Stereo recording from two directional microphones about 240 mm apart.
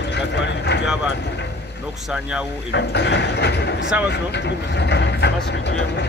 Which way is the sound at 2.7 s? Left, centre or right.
Left.